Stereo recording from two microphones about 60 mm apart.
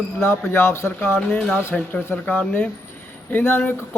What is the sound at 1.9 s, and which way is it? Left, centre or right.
Speech, left.